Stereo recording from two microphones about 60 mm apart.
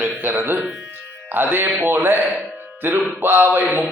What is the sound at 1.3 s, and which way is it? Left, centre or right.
Music, right.